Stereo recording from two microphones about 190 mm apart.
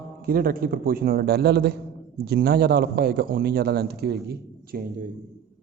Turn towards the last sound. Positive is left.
turn(degrees=-55)  # may be behind; listen again after turning